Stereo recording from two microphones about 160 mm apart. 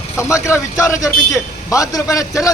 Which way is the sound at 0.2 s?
20° left (ahead or behind).